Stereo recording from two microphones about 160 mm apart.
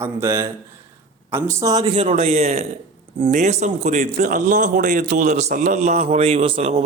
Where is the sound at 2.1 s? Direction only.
40° right (ahead or behind).